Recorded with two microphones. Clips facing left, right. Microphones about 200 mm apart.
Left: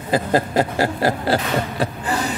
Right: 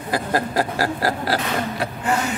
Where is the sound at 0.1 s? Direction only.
25° left (ahead or behind).